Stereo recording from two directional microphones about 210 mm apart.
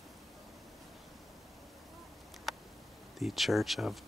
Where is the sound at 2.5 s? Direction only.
Centre (ahead or behind).